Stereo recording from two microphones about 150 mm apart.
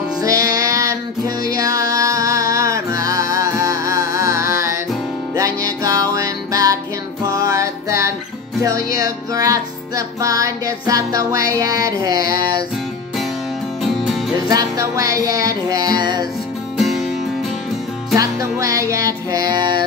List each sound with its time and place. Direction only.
0.2 s music: 25° right (ahead or behind)
13.8 s music: centre (ahead or behind)
14.5 s music: 25° right (ahead or behind)
16.7 s music: 5° right (ahead or behind)
18.1 s music: 20° right (ahead or behind)